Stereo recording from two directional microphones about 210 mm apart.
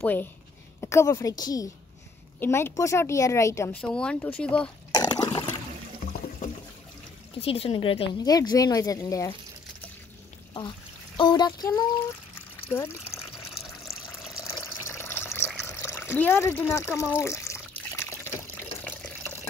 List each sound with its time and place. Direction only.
0.0 s a woman's voice: 10° left (ahead or behind)
4.9 s toilet flush: 20° left (ahead or behind)
7.3 s speech: 30° left (ahead or behind)
11.1 s speech: 20° left (ahead or behind)
14.4 s water: 15° left (ahead or behind)